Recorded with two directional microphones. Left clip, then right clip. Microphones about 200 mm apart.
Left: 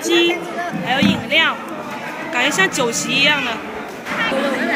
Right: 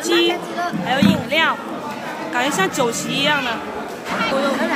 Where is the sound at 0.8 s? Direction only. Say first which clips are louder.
Left 1 dB; 40° right (ahead or behind).